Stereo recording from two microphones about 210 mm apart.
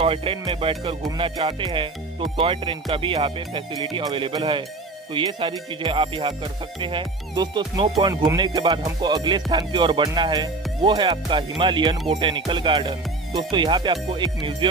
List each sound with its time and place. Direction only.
0.0 s speech: 25° right (ahead or behind)